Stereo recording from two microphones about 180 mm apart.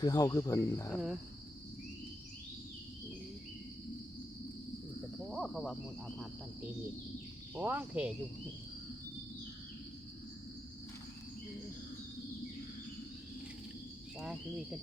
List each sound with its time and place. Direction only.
0.0 s speech: 20° left (ahead or behind)
5.3 s speech: centre (ahead or behind)
7.5 s speech: 10° right (ahead or behind)
14.2 s speech: 5° right (ahead or behind)